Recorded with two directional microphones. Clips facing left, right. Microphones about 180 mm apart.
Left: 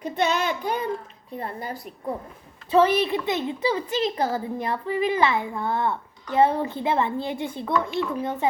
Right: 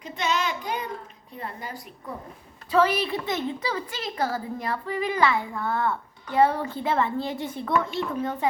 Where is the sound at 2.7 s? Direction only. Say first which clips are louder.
Left 3 dB; 25° left (ahead or behind).